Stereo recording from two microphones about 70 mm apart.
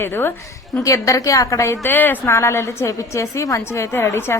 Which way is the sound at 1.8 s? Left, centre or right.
Left.